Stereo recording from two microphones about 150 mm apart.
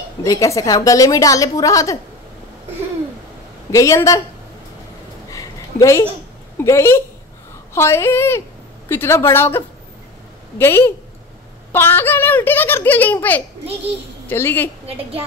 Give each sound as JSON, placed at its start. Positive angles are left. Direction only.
{"t": 0.2, "sound": "a woman's voice", "side_deg": 20}
{"t": 3.7, "sound": "a woman's voice", "side_deg": 20}
{"t": 5.3, "sound": "a sound", "side_deg": 20}
{"t": 6.6, "sound": "a child's voice", "side_deg": 20}
{"t": 10.6, "sound": "a child's voice", "side_deg": 15}